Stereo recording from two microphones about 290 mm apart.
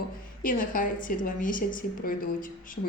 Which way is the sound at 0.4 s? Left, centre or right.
Left.